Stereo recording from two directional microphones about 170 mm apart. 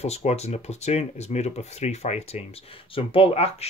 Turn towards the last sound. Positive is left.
turn(degrees=35)  # may be behind; listen again after turning